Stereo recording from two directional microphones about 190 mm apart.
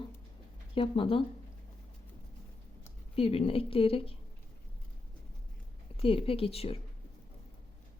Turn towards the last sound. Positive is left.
turn(degrees=30)  # may be behind; listen again after turning